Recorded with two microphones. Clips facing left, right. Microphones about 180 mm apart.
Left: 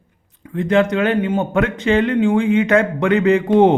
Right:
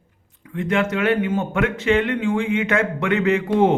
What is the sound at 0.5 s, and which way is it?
A man's voice, 35° left (ahead or behind).